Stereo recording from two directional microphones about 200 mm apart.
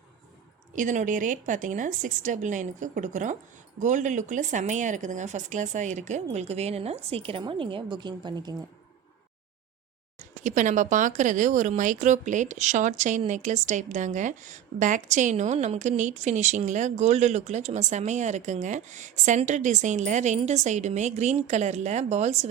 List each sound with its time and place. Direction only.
0.8 s speech: 40° right (ahead or behind); by 8.5 s 20° right (ahead or behind)
10.2 s speech: 40° right (ahead or behind)